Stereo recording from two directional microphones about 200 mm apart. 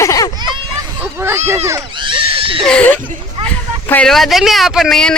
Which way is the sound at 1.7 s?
20° right (ahead or behind).